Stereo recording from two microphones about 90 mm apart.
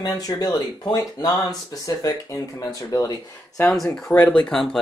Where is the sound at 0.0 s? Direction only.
50° left (ahead or behind).